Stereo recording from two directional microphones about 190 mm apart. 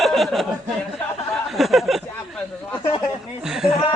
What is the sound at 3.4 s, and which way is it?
Speech, 5° right (ahead or behind).